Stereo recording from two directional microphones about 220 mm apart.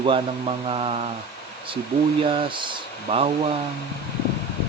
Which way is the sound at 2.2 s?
25° right (ahead or behind).